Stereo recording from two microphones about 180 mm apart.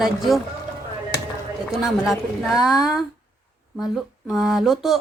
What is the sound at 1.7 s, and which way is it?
Speech, centre (ahead or behind).